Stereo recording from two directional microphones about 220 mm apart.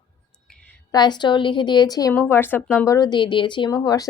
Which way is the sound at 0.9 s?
20° left (ahead or behind).